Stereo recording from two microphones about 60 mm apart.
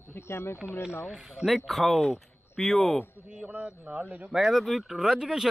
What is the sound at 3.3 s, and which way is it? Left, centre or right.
Speech, centre.